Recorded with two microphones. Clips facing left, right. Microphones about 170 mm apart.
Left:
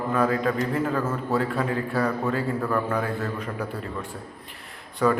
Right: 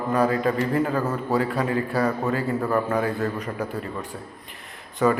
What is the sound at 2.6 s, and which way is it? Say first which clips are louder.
Speech: right 4 dB; 15° right (ahead or behind).